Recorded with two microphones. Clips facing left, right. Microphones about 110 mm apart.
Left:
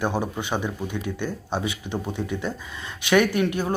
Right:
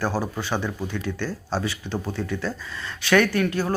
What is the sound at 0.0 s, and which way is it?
Speech, 20° left (ahead or behind).